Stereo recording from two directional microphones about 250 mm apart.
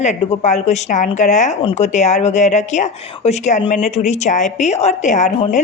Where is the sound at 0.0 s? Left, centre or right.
Left.